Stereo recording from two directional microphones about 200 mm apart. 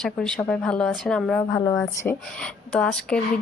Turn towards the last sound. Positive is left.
turn(degrees=5)  # may be behind; listen again after turning